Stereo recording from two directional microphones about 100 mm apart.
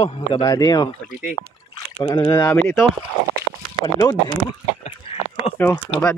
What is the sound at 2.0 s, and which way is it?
Speech, 40° left (ahead or behind).